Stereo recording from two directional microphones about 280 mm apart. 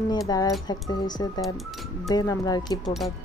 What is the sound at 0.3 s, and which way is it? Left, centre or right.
Speech, centre.